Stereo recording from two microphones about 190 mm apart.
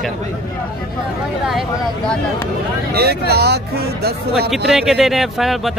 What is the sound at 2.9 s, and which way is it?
Speech, 55° right (ahead or behind).